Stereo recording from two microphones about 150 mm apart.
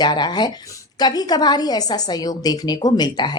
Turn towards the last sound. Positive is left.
turn(degrees=30)  # may be behind; listen again after turning